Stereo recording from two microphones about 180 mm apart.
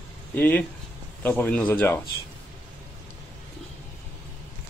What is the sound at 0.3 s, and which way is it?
A man's voice, 10° left (ahead or behind).